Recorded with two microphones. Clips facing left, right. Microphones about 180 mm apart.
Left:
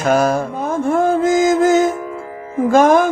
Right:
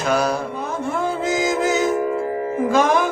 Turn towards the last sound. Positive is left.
turn(degrees=45)  # may be behind; listen again after turning